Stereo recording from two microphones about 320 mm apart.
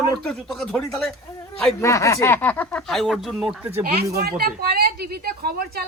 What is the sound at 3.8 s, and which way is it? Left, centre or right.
Speech, right.